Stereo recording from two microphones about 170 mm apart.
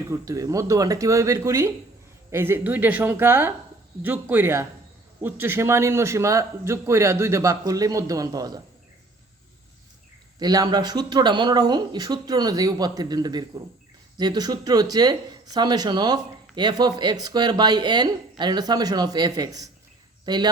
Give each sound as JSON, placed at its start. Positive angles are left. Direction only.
{"t": 0.1, "sound": "a man's voice", "side_deg": -20}
{"t": 10.4, "sound": "speech", "side_deg": -20}